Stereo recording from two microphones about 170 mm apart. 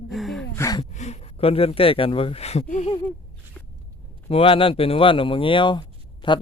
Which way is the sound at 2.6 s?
45° left (ahead or behind).